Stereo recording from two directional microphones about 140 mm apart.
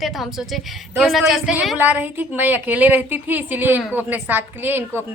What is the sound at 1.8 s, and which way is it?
A woman's voice, 10° right (ahead or behind).